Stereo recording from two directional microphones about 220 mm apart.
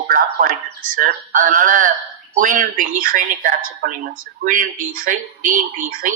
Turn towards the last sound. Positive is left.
turn(degrees=-35)  # may be behind; listen again after turning